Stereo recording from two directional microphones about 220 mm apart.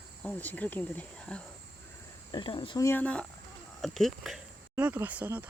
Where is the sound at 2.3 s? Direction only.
20° left (ahead or behind).